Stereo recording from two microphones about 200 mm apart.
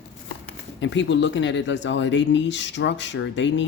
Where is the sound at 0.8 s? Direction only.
65° left (ahead or behind).